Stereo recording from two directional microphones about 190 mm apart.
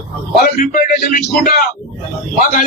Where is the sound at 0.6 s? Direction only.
45° left (ahead or behind).